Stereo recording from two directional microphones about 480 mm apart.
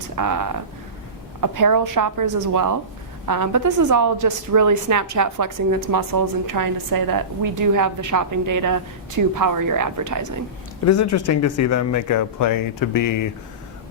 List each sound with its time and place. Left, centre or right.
0.2 s a woman's voice: right
10.8 s speech: left